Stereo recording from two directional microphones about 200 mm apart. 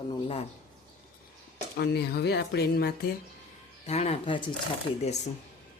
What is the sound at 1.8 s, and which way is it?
Speech, 55° left (ahead or behind).